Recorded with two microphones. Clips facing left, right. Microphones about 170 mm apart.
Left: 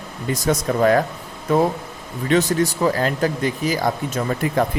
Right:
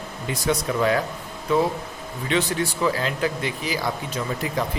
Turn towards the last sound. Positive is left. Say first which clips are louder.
# left 6 dB
turn(degrees=55)  # may be behind; listen again after turning